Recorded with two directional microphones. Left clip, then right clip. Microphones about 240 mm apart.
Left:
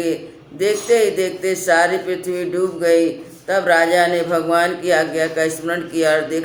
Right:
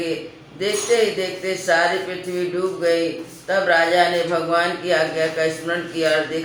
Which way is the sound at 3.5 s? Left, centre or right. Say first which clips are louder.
Left 2 dB; left.